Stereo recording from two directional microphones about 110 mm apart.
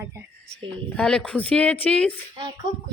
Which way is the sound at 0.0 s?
20° right (ahead or behind).